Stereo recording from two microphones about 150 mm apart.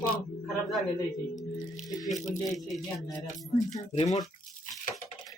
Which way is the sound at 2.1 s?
55° left (ahead or behind).